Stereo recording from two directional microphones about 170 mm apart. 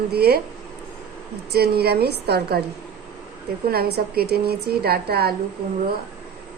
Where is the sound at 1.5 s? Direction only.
70° right (ahead or behind).